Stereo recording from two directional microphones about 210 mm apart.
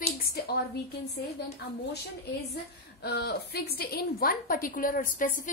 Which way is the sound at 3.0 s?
50° left (ahead or behind).